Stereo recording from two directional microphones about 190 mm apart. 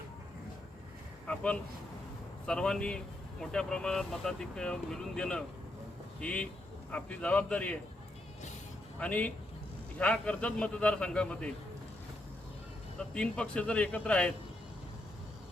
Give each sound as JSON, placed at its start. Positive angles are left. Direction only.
{"t": 1.3, "sound": "a man's voice", "side_deg": 5}
{"t": 9.0, "sound": "a man's voice", "side_deg": 5}
{"t": 13.0, "sound": "speech", "side_deg": 5}